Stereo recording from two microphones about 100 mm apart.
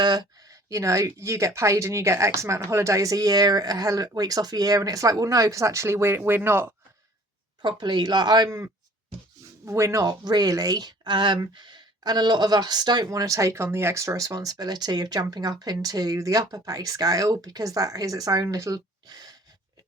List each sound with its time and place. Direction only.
0.0 s speech: 45° right (ahead or behind); by 6.7 s 20° right (ahead or behind)
7.6 s speech: 50° right (ahead or behind)
8.4 s speech: 30° right (ahead or behind); by 13.1 s 45° right (ahead or behind)
13.1 s speech: 30° right (ahead or behind)